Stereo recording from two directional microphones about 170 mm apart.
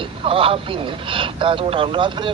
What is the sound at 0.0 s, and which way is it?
A man's voice, 30° right (ahead or behind).